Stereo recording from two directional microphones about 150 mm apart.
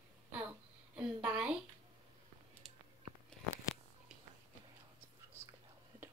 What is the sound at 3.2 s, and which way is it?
Biting, centre (ahead or behind).